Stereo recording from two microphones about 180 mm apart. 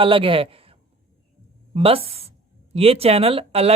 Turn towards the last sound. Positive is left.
turn(degrees=-35)  # may be behind; listen again after turning